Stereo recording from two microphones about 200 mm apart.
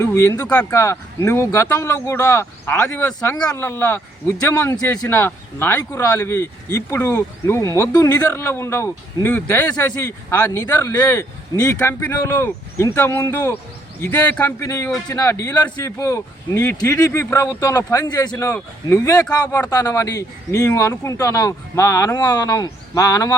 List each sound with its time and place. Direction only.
0.0 s speech: 15° left (ahead or behind)